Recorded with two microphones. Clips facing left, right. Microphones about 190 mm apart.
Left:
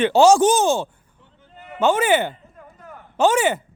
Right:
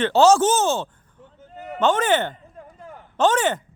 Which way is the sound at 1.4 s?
40° right (ahead or behind).